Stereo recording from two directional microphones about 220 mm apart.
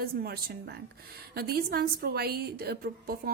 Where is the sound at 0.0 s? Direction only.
45° right (ahead or behind).